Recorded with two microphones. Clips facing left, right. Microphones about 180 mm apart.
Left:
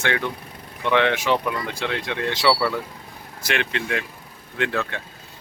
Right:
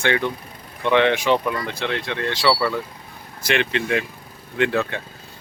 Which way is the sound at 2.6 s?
5° left (ahead or behind).